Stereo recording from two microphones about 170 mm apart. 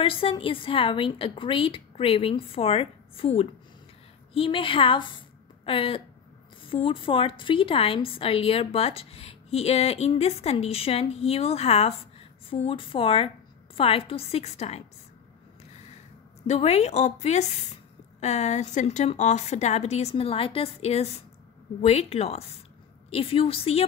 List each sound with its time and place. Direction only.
0.0 s a woman's voice: 30° left (ahead or behind)
16.4 s a woman's voice: 40° left (ahead or behind)